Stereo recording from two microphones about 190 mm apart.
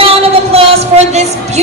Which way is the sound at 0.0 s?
30° right (ahead or behind).